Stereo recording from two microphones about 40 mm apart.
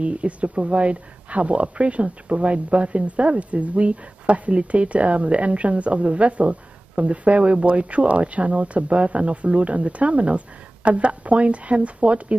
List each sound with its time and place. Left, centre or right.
0.0 s speech: right